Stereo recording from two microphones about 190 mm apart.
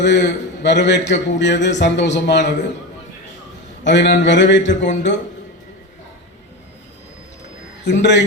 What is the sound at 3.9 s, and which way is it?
A man's voice, 65° left (ahead or behind).